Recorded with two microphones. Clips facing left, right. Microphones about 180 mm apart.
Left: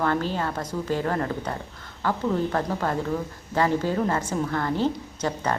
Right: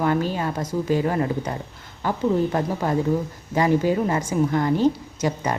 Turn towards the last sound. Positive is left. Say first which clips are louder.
# right 2 dB
turn(degrees=-15)  # may be behind; listen again after turning